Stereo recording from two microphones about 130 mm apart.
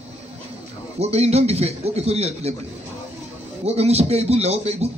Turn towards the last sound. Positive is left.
turn(degrees=-55)  # may be behind; listen again after turning